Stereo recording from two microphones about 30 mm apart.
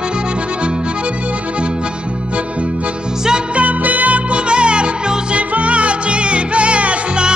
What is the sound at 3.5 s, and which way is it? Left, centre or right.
Music, right.